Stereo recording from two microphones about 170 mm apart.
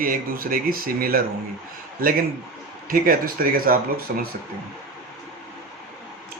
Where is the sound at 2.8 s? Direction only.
55° right (ahead or behind).